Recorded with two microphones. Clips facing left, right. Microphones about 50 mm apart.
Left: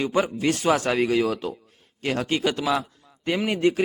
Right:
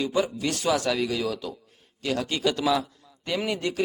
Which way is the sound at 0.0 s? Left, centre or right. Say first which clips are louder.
Left 3 dB; left.